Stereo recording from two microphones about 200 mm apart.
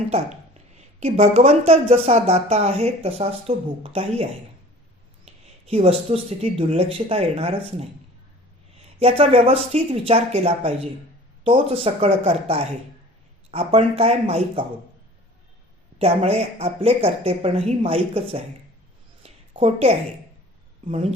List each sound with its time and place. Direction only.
0.1 s a woman's voice: 35° right (ahead or behind)
9.0 s a woman's voice: 30° right (ahead or behind)
16.0 s a woman's voice: 30° right (ahead or behind)
19.2 s a sound: 30° right (ahead or behind)
20.8 s a woman's voice: 30° right (ahead or behind)